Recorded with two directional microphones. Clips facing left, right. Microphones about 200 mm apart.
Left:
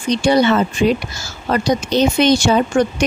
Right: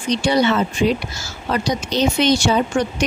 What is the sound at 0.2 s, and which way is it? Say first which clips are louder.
Speech: left 4 dB; 50° left (ahead or behind).